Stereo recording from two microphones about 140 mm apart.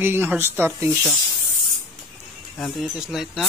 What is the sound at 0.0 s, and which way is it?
Speech, 15° right (ahead or behind).